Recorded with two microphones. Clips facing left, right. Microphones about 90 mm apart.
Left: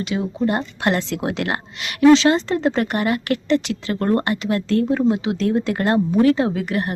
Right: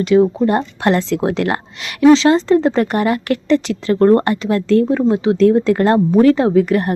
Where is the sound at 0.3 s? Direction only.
35° right (ahead or behind).